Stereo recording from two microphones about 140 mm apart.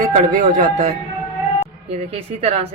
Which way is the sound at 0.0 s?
75° right (ahead or behind).